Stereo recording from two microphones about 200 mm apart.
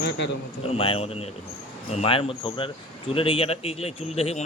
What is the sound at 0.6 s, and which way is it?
Speech, 30° left (ahead or behind).